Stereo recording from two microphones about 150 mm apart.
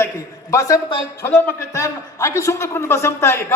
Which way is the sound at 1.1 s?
15° left (ahead or behind).